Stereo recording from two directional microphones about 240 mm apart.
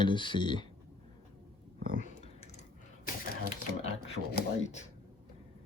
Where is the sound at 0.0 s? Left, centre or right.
Centre.